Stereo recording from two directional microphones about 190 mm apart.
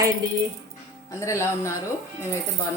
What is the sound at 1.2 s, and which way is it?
Speech, 15° left (ahead or behind).